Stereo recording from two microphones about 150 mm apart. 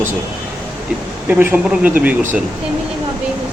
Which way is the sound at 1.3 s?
10° right (ahead or behind).